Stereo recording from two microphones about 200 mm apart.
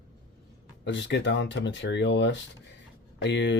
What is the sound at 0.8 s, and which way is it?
Speech, 60° left (ahead or behind).